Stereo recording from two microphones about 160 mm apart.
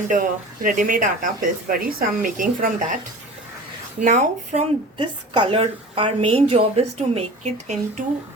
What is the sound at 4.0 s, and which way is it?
Speech, 50° right (ahead or behind).